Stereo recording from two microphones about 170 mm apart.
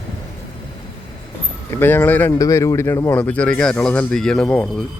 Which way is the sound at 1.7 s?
10° left (ahead or behind).